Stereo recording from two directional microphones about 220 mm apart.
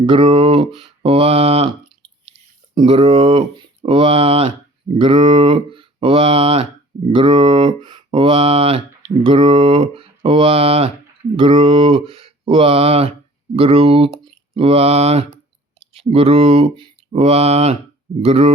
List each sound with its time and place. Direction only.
0.0 s speech: 25° right (ahead or behind)
2.3 s a sound: 25° right (ahead or behind)
3.8 s speech: 25° right (ahead or behind)